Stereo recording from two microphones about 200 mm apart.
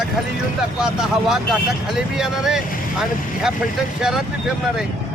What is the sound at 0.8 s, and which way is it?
Speech, 5° right (ahead or behind).